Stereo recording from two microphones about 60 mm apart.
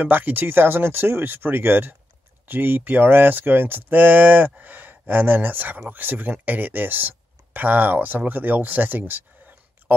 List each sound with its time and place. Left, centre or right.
0.0 s speech: right